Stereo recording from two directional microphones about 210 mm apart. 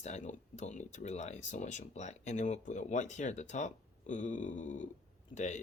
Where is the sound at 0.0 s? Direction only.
35° left (ahead or behind).